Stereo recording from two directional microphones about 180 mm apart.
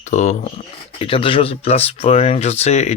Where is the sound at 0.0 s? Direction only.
40° left (ahead or behind).